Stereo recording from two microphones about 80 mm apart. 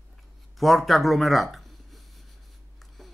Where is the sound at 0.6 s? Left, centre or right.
Centre.